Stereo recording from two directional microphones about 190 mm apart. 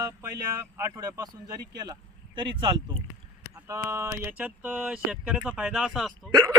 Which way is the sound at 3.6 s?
15° right (ahead or behind).